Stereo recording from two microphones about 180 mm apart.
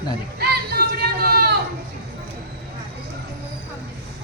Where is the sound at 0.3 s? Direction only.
60° right (ahead or behind).